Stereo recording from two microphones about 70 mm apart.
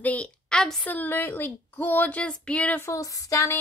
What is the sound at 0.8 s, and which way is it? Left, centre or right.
Speech, left.